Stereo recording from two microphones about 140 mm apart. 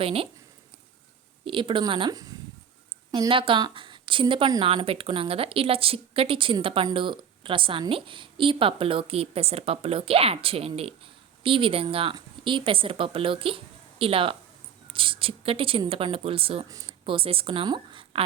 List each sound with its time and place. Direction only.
0.0 s a woman's voice: 40° right (ahead or behind)
1.5 s a woman's voice: 35° right (ahead or behind)
16.6 s speech: 25° right (ahead or behind)
17.1 s a woman's voice: 40° right (ahead or behind)